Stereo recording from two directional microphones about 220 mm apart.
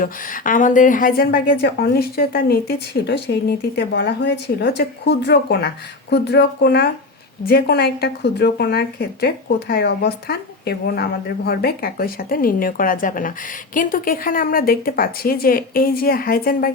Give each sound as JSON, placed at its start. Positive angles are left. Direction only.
{"t": 0.0, "sound": "a woman's voice", "side_deg": 35}